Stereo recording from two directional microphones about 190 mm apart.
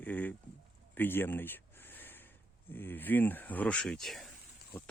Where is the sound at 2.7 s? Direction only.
10° left (ahead or behind).